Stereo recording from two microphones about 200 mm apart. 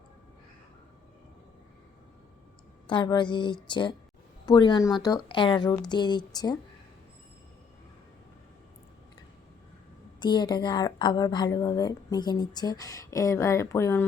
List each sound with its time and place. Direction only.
2.8 s a woman's voice: 25° left (ahead or behind)
10.2 s a woman's voice: 20° left (ahead or behind)